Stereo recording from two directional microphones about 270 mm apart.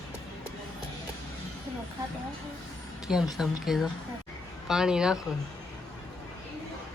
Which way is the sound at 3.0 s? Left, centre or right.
Centre.